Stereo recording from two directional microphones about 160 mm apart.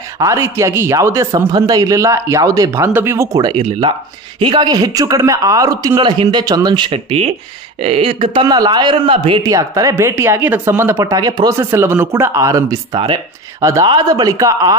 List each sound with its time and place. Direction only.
0.2 s a man's voice: 20° right (ahead or behind); by 9.4 s 35° right (ahead or behind)
9.4 s speech: 20° right (ahead or behind)
13.6 s speech: 20° right (ahead or behind)